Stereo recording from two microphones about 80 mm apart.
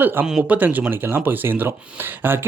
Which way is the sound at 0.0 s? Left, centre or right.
Right.